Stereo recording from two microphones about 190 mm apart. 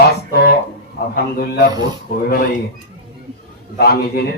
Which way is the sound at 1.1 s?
55° left (ahead or behind).